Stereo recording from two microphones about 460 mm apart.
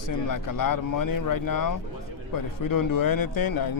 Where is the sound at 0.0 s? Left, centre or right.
Left.